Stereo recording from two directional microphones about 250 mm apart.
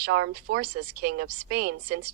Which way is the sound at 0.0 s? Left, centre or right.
Right.